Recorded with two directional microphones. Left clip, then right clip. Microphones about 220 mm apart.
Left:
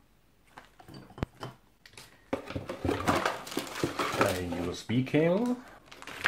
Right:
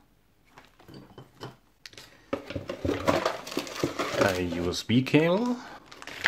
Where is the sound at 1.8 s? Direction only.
40° right (ahead or behind).